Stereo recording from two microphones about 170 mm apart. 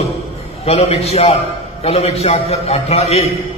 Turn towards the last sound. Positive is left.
turn(degrees=35)  # may be behind; listen again after turning